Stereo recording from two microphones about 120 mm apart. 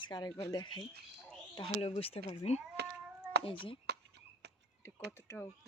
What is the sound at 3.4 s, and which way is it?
Speech, 45° left (ahead or behind).